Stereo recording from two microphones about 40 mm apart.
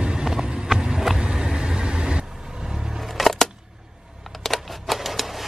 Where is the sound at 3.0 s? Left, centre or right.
Centre.